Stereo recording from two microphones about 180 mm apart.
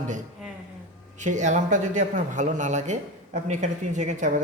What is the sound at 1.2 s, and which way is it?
Speech, 40° right (ahead or behind).